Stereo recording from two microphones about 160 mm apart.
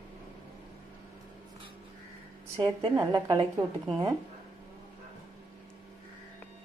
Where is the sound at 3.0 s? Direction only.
25° right (ahead or behind).